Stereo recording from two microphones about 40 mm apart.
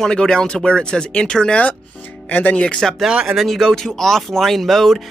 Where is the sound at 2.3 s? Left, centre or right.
Left.